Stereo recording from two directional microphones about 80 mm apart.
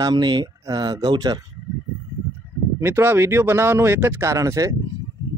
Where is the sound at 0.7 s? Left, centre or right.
Right.